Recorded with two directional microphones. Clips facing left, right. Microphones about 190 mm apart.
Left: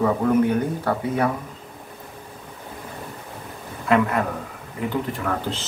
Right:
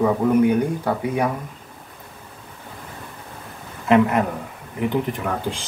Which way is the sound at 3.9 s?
20° right (ahead or behind).